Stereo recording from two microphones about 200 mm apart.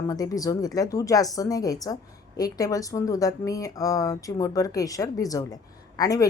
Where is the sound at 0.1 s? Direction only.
15° left (ahead or behind).